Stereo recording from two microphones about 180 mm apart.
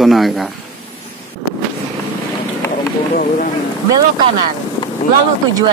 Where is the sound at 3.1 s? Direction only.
50° left (ahead or behind).